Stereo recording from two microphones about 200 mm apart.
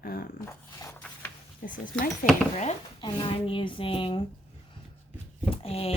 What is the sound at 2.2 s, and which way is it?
Speech, 45° left (ahead or behind).